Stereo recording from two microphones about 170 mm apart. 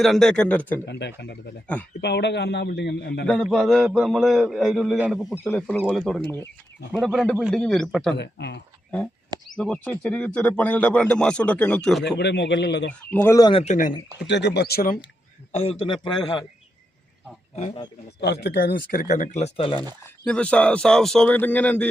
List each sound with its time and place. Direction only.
0.0 s a man's voice: centre (ahead or behind)
0.9 s a man's voice: 90° left
3.2 s a man's voice: centre (ahead or behind)
5.3 s a man's voice: 10° left (ahead or behind)
8.1 s a man's voice: 85° left
9.6 s a man's voice: 5° left (ahead or behind)
12.0 s a man's voice: 85° left
12.9 s a man's voice: 10° left (ahead or behind)
13.5 s a man's voice: 35° left (ahead or behind)
14.3 s speech: 90° left; by 14.9 s 65° left (ahead or behind)
15.5 s a man's voice: 35° left (ahead or behind)
17.5 s speech: 45° left (ahead or behind)
18.2 s speech: 80° left; by 19.8 s 30° left (ahead or behind)
20.2 s a man's voice: 5° left (ahead or behind)